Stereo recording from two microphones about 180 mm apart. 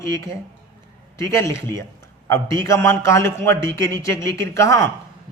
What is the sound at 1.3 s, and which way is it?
A man's voice, 15° left (ahead or behind).